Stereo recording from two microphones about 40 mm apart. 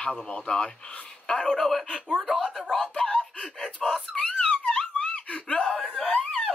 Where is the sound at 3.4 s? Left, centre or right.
Centre.